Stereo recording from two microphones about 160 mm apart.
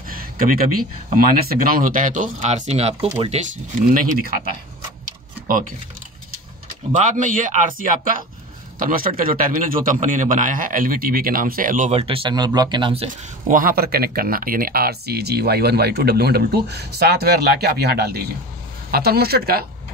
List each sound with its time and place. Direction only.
0.1 s a sound: 65° right (ahead or behind)
1.1 s speech: 65° right (ahead or behind); by 3.5 s 45° right (ahead or behind)
3.9 s a man's voice: 60° right (ahead or behind)
5.0 s tick-tock: 60° right (ahead or behind)
7.0 s a man's voice: 50° right (ahead or behind)
11.9 s speech: 35° right (ahead or behind)
13.5 s speech: 60° right (ahead or behind)